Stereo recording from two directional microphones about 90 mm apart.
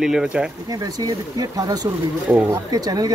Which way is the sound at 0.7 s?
40° right (ahead or behind).